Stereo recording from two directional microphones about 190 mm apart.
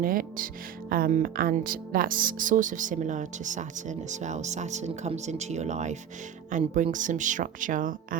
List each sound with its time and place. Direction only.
0.0 s speech: 50° right (ahead or behind)